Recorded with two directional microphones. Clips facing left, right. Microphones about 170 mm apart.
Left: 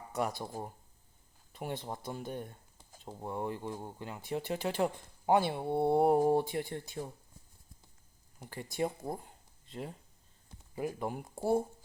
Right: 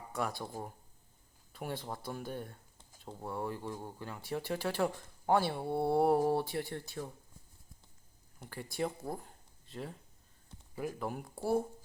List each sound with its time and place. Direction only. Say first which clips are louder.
0.2 s speech: left 2 dB; 15° left (ahead or behind)
8.4 s speech: left 2 dB; 15° left (ahead or behind)
11.3 s speech: left 2 dB; 20° left (ahead or behind)